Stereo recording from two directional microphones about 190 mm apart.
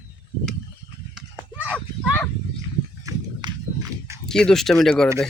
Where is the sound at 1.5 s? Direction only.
10° right (ahead or behind).